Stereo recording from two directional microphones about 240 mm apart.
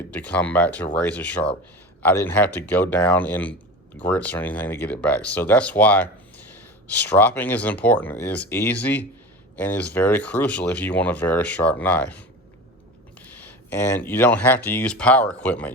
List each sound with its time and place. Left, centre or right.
0.1 s speech: centre